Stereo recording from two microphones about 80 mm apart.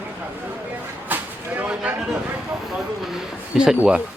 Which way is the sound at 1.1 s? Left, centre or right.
Right.